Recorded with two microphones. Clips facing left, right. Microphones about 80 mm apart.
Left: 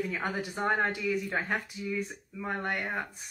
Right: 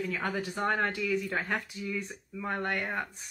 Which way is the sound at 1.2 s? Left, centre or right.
Centre.